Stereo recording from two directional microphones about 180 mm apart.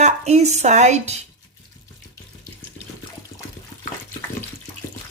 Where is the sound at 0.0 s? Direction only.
40° right (ahead or behind).